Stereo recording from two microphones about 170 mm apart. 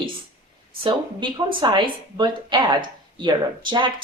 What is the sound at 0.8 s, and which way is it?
A woman's voice, 30° right (ahead or behind).